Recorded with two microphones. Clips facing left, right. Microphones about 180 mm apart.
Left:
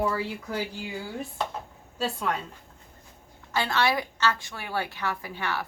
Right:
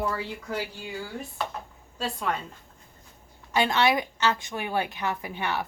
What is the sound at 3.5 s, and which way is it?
A woman's voice, 15° right (ahead or behind).